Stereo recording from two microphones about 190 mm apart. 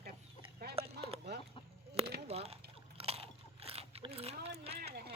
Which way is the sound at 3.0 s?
30° right (ahead or behind).